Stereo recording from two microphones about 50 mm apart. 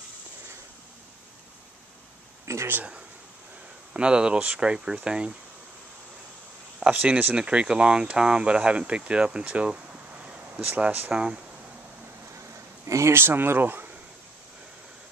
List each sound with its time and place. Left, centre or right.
2.4 s a sound: right
3.9 s speech: centre
6.8 s speech: right
7.3 s speech: centre
11.1 s speech: centre
12.8 s speech: right
13.1 s speech: right